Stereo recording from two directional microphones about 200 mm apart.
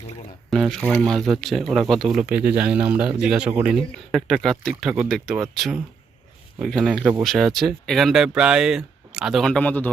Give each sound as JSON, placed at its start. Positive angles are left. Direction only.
{"t": 0.5, "sound": "speech", "side_deg": 0}